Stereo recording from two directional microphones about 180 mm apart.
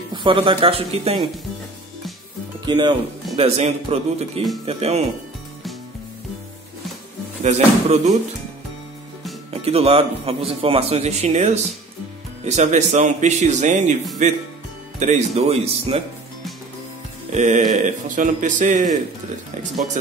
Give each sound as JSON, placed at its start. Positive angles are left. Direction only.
{"t": 0.1, "sound": "speech", "side_deg": -25}
{"t": 2.6, "sound": "speech", "side_deg": -25}
{"t": 3.3, "sound": "speech", "side_deg": -35}
{"t": 7.4, "sound": "speech", "side_deg": -40}
{"t": 9.5, "sound": "speech", "side_deg": -35}
{"t": 17.3, "sound": "speech", "side_deg": -40}